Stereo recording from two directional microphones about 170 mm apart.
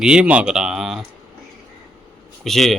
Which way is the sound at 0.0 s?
5° right (ahead or behind).